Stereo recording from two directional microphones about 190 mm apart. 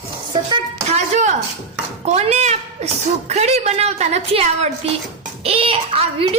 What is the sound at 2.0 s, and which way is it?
A woman's voice, 35° right (ahead or behind).